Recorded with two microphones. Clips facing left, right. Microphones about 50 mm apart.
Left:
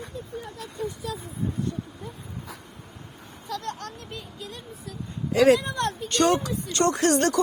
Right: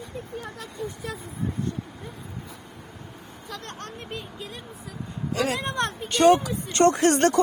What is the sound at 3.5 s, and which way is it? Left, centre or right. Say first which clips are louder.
Speech: left 5 dB; right.